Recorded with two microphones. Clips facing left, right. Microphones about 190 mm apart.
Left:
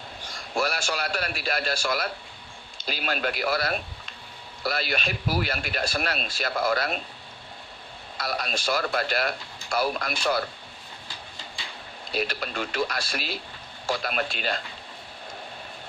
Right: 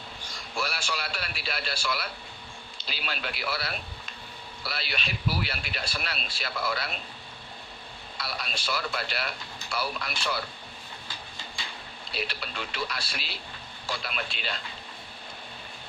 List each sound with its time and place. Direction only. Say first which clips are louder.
0.5 s speech: left 6 dB; 45° left (ahead or behind)
8.2 s speech: left 7 dB; 45° left (ahead or behind)
12.1 s speech: left 6 dB; 45° left (ahead or behind)